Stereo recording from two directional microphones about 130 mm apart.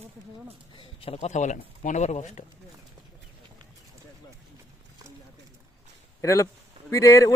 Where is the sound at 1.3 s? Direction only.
70° left (ahead or behind).